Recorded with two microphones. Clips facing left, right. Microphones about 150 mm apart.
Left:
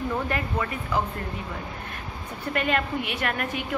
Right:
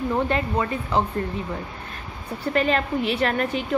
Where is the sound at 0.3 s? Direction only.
30° right (ahead or behind).